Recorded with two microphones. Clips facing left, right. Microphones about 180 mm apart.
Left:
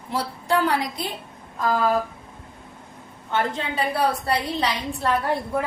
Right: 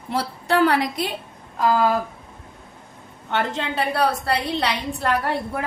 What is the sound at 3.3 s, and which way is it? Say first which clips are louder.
A woman's voice: right 1 dB; 75° right (ahead or behind).